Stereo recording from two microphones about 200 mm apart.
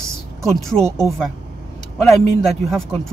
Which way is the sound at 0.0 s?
Centre (ahead or behind).